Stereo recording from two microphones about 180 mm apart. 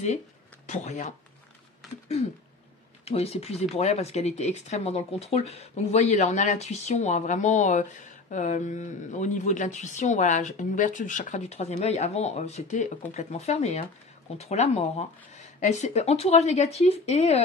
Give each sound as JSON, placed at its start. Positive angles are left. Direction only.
{"t": 0.7, "sound": "speech", "side_deg": 40}
{"t": 3.1, "sound": "speech", "side_deg": 35}